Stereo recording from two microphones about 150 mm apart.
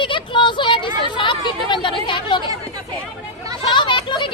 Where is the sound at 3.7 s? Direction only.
35° left (ahead or behind).